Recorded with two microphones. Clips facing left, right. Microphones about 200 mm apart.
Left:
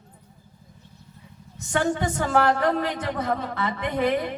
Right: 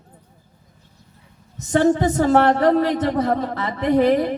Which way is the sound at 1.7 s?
40° right (ahead or behind).